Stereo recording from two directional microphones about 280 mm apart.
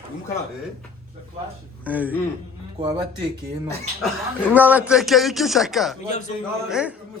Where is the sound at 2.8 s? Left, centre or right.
Centre.